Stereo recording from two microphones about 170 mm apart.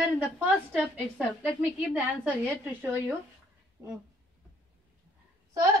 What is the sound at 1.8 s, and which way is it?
A woman's voice, 10° right (ahead or behind).